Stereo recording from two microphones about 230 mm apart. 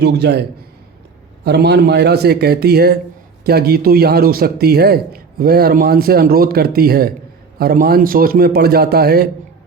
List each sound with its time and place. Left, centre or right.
0.0 s a man's voice: right
1.5 s a man's voice: right